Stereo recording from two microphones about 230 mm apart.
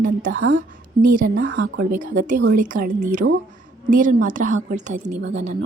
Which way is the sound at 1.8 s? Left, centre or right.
Right.